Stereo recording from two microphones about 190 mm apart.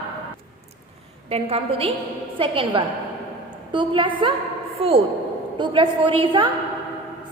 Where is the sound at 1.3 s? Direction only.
30° right (ahead or behind).